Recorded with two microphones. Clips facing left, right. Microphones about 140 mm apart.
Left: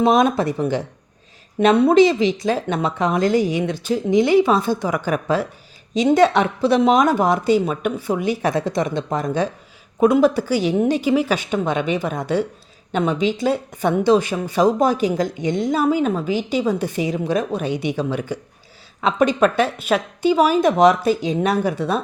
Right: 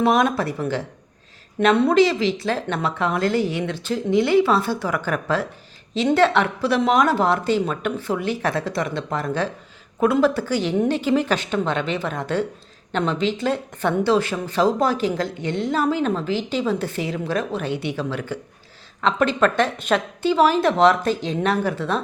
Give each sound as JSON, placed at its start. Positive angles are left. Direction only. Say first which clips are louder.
{"t": 0.0, "sound": "speech", "louder": "left 3 dB", "side_deg": 20}